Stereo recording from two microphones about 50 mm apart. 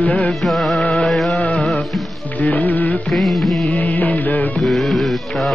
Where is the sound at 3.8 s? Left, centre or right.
Left.